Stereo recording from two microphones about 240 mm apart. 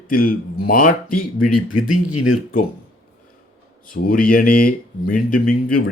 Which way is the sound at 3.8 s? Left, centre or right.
Left.